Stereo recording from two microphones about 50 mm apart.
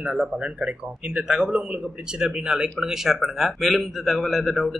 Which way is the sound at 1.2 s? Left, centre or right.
Centre.